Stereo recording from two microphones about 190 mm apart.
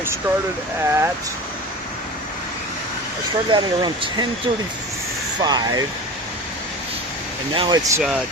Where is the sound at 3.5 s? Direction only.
25° right (ahead or behind).